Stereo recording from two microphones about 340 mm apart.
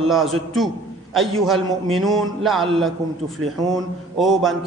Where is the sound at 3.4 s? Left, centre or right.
Right.